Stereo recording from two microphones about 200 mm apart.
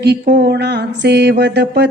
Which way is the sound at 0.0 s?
55° right (ahead or behind).